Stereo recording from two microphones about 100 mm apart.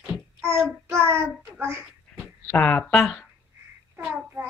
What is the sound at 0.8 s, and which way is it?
A child's voice, 25° right (ahead or behind).